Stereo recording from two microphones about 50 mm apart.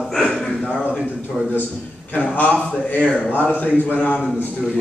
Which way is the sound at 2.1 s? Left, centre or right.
Left.